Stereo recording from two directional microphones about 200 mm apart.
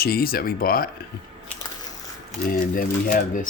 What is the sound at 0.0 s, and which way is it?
Speech, 50° left (ahead or behind).